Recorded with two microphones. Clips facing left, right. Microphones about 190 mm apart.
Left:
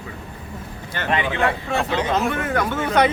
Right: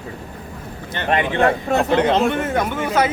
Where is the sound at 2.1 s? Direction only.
25° right (ahead or behind); by 3.0 s 10° right (ahead or behind).